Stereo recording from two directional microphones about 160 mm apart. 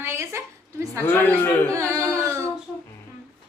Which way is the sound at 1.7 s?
20° right (ahead or behind).